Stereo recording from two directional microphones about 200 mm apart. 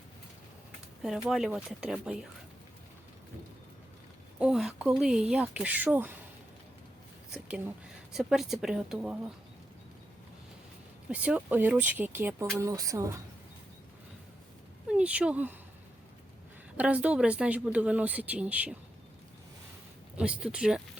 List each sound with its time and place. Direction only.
1.0 s speech: centre (ahead or behind)
4.4 s speech: 5° right (ahead or behind)
7.3 s speech: 5° right (ahead or behind)
11.1 s a woman's voice: 5° right (ahead or behind)
14.8 s speech: 5° right (ahead or behind)
16.7 s a woman's voice: 5° right (ahead or behind)
20.1 s speech: 5° right (ahead or behind)